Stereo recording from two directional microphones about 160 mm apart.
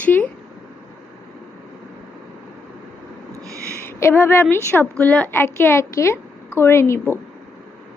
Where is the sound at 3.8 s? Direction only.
15° left (ahead or behind).